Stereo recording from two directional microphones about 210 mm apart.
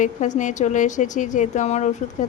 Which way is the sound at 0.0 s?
35° left (ahead or behind).